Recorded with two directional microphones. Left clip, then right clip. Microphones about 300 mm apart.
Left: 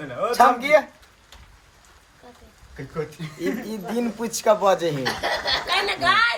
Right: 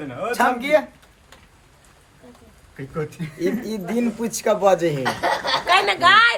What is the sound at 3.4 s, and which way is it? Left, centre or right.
A woman's voice, centre.